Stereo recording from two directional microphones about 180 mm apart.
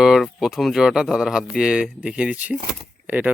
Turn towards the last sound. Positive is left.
turn(degrees=-10)  # may be behind; listen again after turning